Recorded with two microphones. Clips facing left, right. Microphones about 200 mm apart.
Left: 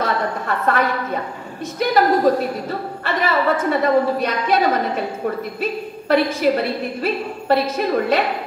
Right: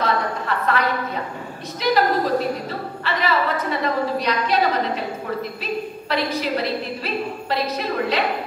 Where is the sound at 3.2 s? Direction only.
45° left (ahead or behind).